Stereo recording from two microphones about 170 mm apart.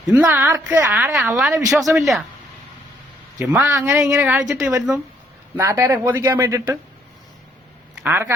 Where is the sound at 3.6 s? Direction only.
15° right (ahead or behind).